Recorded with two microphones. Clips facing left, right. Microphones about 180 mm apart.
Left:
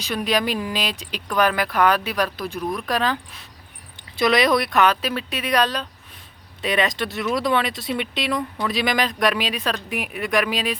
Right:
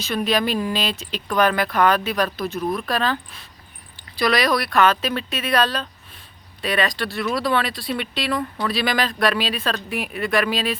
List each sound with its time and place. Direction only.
0.0 s speech: 10° left (ahead or behind)
4.2 s speech: 20° left (ahead or behind)